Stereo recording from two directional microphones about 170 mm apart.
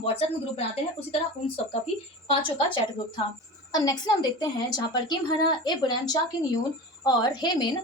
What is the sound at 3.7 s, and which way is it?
A woman's voice, 25° left (ahead or behind).